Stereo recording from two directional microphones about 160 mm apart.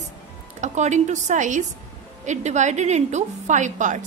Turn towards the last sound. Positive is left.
turn(degrees=-50)  # may be behind; listen again after turning